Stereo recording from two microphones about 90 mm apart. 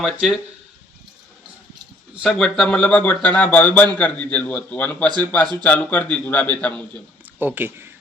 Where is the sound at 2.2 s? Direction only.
5° left (ahead or behind).